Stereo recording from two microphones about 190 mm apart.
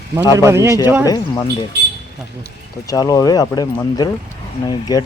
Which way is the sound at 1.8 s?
65° right (ahead or behind).